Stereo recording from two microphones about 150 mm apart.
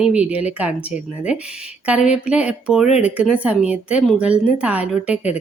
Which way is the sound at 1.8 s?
5° right (ahead or behind).